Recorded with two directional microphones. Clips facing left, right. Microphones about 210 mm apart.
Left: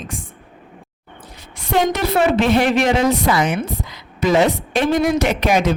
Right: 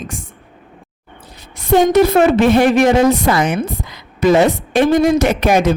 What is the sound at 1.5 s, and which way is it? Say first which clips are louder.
A woman's voice: right 8 dB; 45° right (ahead or behind).